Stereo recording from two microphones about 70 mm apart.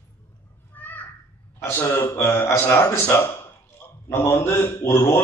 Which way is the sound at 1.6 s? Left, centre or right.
Left.